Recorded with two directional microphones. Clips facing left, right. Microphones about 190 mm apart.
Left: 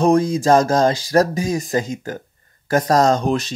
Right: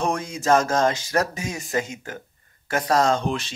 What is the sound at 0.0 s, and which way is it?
Speech, 35° left (ahead or behind).